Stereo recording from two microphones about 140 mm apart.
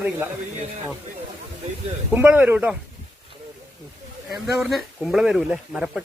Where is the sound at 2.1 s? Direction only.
15° right (ahead or behind).